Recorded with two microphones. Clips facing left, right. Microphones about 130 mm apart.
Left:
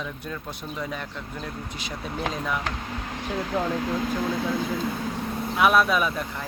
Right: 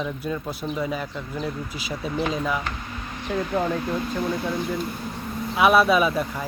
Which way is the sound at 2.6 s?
85° left.